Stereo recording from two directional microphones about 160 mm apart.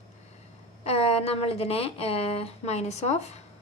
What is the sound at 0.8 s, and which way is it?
A woman's voice, 40° left (ahead or behind).